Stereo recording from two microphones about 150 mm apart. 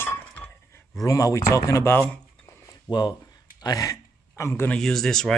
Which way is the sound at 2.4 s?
20° left (ahead or behind).